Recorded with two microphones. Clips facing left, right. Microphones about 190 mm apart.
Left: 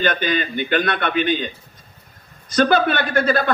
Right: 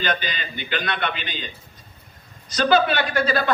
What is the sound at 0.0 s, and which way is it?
A man's voice, 50° left (ahead or behind).